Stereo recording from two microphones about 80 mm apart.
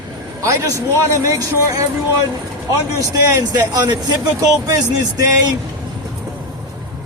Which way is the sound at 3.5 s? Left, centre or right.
Right.